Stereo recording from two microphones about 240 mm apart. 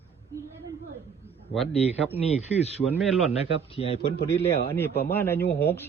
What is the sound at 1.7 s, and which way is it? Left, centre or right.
Speech, left.